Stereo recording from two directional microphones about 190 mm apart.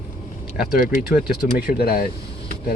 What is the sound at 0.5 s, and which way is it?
Speech, 45° left (ahead or behind).